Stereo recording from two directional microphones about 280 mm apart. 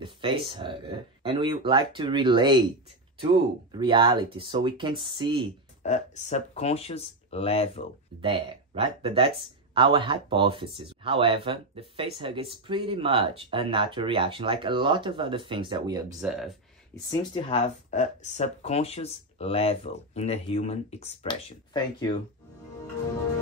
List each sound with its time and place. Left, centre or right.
0.0 s speech: centre
3.7 s speech: centre
5.8 s speech: left
8.2 s speech: centre
16.2 s speech: centre
17.1 s speech: centre